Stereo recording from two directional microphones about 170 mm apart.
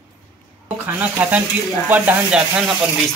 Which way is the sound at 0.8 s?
10° right (ahead or behind).